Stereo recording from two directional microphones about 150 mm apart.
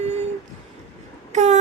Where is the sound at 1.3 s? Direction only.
50° right (ahead or behind).